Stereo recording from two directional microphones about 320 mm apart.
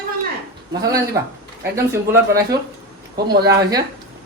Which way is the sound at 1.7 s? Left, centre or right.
Centre.